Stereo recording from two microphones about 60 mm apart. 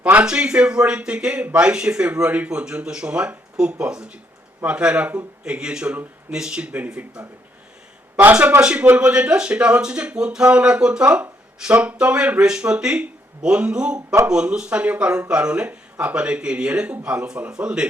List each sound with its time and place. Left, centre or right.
0.0 s speech: right
8.2 s speech: right